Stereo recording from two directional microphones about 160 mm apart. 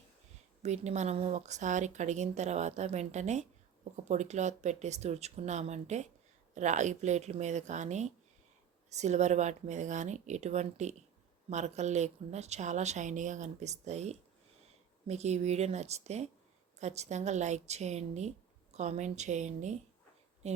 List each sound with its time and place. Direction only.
0.6 s speech: 45° right (ahead or behind)